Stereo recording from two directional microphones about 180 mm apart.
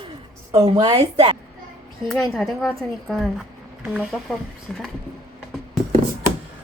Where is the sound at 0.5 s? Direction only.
25° right (ahead or behind).